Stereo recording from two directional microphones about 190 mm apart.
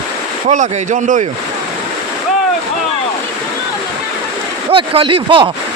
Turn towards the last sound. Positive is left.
turn(degrees=-25)  # may be behind; listen again after turning